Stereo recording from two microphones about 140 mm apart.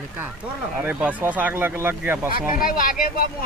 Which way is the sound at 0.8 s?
10° right (ahead or behind).